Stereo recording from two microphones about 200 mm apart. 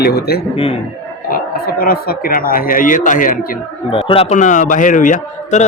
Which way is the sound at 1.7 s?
45° left (ahead or behind).